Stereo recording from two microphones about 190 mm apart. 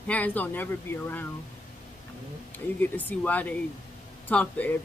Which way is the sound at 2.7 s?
10° left (ahead or behind).